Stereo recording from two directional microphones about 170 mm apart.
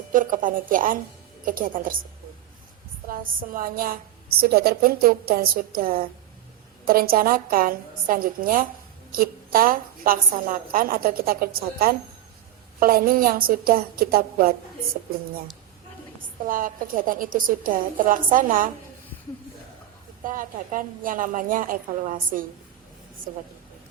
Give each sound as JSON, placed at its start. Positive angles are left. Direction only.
{"t": 0.1, "sound": "a woman's voice", "side_deg": -50}
{"t": 3.1, "sound": "a woman's voice", "side_deg": -55}
{"t": 16.5, "sound": "a woman's voice", "side_deg": -55}
{"t": 20.2, "sound": "a woman's voice", "side_deg": -55}